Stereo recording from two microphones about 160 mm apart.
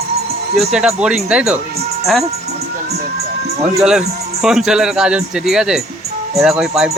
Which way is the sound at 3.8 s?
5° right (ahead or behind).